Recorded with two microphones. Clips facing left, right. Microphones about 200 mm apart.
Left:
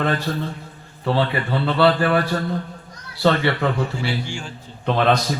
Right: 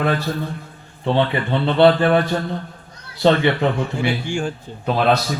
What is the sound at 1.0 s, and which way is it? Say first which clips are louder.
A man's voice: right 2 dB; 20° right (ahead or behind).